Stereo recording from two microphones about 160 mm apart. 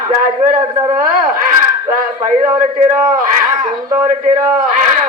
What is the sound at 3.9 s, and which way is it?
Speech, 15° right (ahead or behind).